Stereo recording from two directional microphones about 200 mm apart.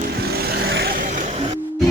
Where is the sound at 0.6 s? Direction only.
50° right (ahead or behind).